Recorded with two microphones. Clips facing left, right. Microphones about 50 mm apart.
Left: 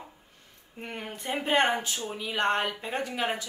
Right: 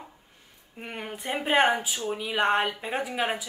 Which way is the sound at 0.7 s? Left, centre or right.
Centre.